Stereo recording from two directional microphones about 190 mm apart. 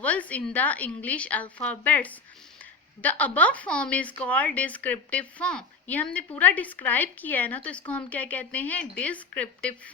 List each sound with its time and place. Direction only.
0.0 s speech: 5° left (ahead or behind)